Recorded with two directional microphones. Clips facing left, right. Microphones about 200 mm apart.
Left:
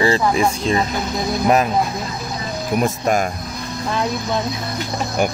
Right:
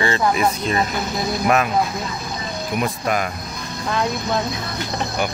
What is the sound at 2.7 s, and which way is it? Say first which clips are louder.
Speech: left 4 dB; 45° left (ahead or behind).